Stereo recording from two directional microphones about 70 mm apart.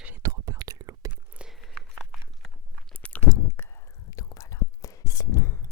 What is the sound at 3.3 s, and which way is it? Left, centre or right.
Whispering, left.